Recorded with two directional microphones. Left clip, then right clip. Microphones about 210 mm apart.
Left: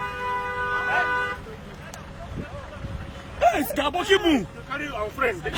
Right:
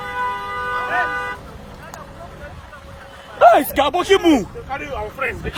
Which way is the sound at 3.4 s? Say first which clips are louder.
Right 10 dB; 10° right (ahead or behind).